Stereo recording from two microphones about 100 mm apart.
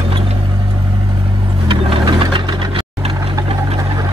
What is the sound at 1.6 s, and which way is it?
Vehicle, 55° right (ahead or behind).